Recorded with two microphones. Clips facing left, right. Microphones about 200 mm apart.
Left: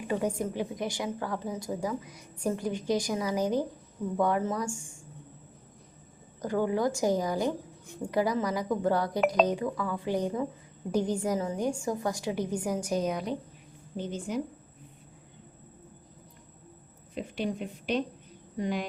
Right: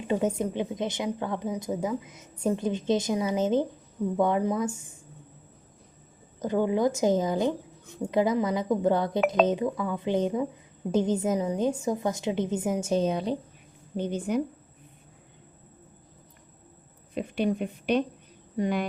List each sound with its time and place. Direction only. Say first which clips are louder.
0.0 s a woman's voice: right 3 dB; 20° right (ahead or behind)
6.4 s a woman's voice: right 3 dB; 20° right (ahead or behind)
13.9 s a woman's voice: right 5 dB; 60° right (ahead or behind)
17.2 s a woman's voice: right 5 dB; 60° right (ahead or behind)